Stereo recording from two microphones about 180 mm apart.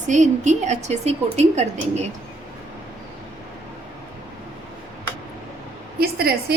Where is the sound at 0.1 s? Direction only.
40° right (ahead or behind).